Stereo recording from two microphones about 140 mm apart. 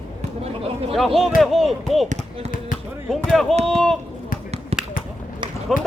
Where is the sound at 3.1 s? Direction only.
Centre (ahead or behind).